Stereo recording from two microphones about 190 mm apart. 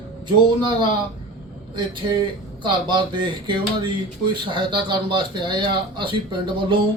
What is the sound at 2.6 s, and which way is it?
Speech, 25° right (ahead or behind).